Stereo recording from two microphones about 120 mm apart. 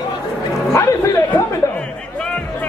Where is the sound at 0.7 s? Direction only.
25° left (ahead or behind).